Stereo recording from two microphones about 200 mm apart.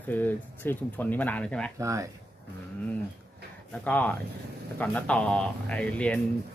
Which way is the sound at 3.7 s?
10° left (ahead or behind).